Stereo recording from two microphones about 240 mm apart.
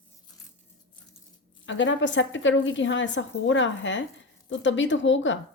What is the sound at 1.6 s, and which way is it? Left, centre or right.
A woman's voice, left.